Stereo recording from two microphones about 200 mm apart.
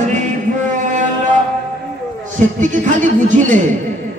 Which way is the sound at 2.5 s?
40° right (ahead or behind).